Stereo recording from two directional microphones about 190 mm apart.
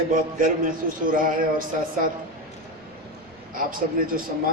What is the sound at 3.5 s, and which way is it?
Speech, 45° right (ahead or behind).